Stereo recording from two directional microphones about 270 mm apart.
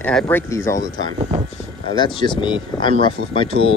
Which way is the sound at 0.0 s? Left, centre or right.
Centre.